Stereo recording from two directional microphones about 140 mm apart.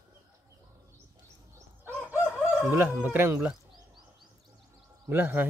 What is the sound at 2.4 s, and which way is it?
Speech, 15° right (ahead or behind).